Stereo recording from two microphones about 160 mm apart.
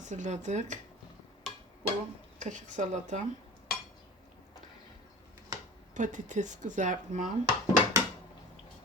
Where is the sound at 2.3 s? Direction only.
50° right (ahead or behind).